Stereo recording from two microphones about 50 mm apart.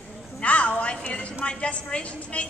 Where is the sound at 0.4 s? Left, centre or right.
Left.